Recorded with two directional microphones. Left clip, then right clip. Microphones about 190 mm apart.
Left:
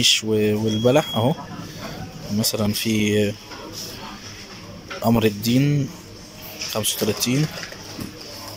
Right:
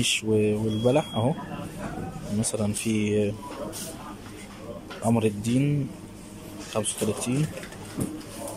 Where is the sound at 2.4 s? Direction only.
5° right (ahead or behind).